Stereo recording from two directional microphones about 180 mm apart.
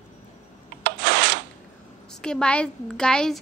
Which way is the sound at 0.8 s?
70° right (ahead or behind).